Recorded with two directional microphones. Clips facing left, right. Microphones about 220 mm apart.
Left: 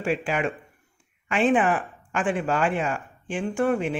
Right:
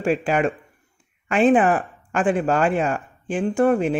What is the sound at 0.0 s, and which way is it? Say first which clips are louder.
Speech: right 5 dB; 40° right (ahead or behind).